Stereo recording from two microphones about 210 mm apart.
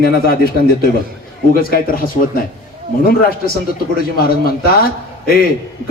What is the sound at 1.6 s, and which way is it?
Speech, 45° left (ahead or behind).